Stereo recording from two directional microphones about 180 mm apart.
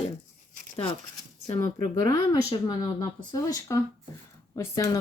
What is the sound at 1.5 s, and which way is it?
Speech, 20° left (ahead or behind).